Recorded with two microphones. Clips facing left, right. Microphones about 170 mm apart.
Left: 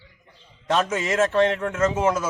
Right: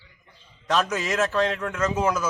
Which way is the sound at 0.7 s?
25° left (ahead or behind).